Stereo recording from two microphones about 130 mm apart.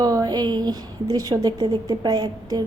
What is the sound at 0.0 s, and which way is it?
A woman's voice, 30° right (ahead or behind).